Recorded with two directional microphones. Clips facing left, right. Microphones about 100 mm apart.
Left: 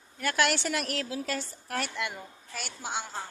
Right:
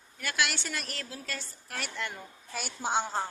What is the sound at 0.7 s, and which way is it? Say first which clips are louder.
Speech: left 7 dB; 70° left (ahead or behind).